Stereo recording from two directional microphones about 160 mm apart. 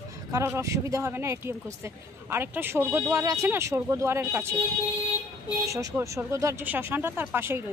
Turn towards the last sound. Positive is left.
turn(degrees=-15)  # may be behind; listen again after turning